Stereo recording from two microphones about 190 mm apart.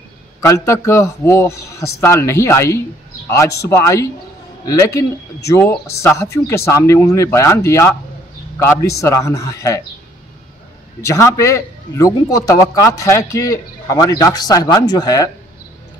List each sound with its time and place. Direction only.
0.5 s a man's voice: 15° left (ahead or behind)
11.1 s a man's voice: 15° left (ahead or behind)